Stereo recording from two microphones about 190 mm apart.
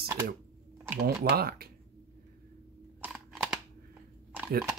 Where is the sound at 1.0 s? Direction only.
55° right (ahead or behind).